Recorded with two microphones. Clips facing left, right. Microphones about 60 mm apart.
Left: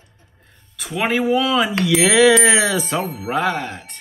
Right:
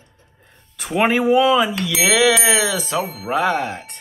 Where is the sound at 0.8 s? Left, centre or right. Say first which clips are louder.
Right 4 dB; right.